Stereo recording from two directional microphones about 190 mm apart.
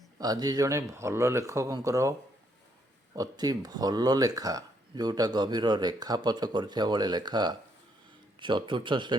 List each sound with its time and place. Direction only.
0.2 s speech: 20° right (ahead or behind)
3.2 s speech: 20° right (ahead or behind)